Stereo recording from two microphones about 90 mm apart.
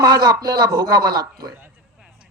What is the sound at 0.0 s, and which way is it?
A man's voice, 45° right (ahead or behind).